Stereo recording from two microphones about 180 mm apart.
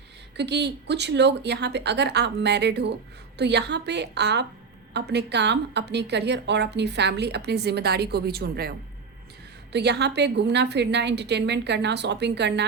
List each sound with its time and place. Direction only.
0.3 s a woman's voice: 70° right (ahead or behind)
9.7 s a woman's voice: 70° right (ahead or behind)